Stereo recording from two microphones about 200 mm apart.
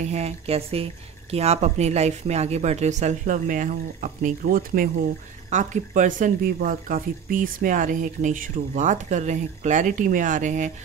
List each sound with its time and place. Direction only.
0.0 s speech: 35° right (ahead or behind)